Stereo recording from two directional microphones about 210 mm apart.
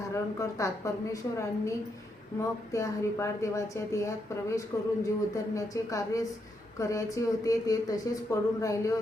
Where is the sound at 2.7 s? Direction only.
15° left (ahead or behind).